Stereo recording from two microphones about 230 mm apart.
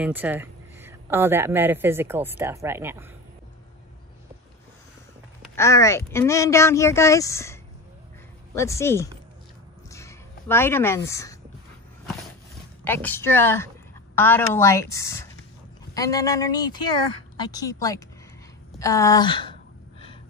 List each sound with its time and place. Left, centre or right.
0.0 s speech: centre
5.6 s speech: centre
8.5 s speech: centre
9.8 s a sound: centre
12.8 s speech: centre